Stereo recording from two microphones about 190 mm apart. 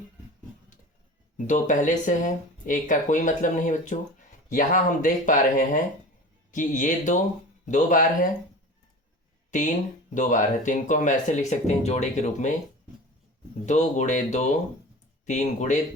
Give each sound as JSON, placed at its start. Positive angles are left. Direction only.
{"t": 1.5, "sound": "speech", "side_deg": 40}
{"t": 9.5, "sound": "speech", "side_deg": 40}
{"t": 13.7, "sound": "speech", "side_deg": 40}